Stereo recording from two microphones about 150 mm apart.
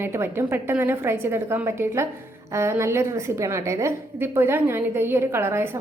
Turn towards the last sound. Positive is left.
turn(degrees=-15)  # may be behind; listen again after turning